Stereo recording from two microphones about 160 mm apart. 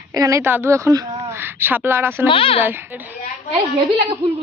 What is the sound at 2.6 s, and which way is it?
Speech, 15° right (ahead or behind).